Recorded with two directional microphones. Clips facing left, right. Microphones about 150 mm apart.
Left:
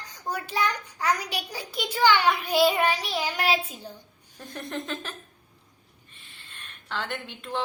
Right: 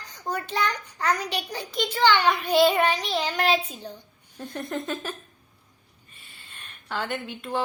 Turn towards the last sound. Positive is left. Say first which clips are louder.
# right 3 dB
turn(degrees=-5)  # may be behind; listen again after turning